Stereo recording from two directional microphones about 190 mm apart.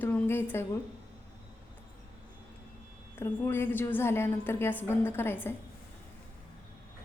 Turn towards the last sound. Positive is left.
turn(degrees=10)  # may be behind; listen again after turning